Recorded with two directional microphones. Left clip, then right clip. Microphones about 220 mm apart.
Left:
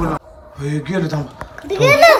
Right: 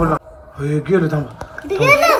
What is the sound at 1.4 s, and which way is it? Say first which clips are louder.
Speech: left 2 dB; 45° left (ahead or behind).